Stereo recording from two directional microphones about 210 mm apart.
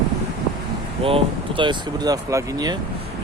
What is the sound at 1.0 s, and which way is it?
Speech, 25° right (ahead or behind).